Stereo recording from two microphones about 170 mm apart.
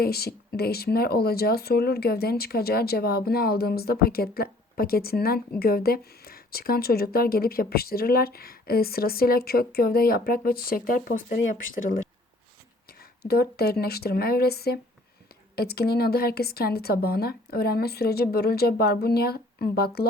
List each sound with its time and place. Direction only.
0.0 s speech: 65° left (ahead or behind)
13.0 s a woman's voice: 65° left (ahead or behind)